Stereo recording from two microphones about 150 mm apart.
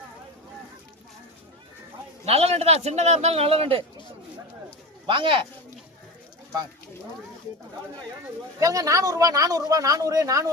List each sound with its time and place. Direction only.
2.2 s a man's voice: 40° right (ahead or behind)
5.0 s speech: 35° right (ahead or behind)
8.5 s speech: 25° right (ahead or behind)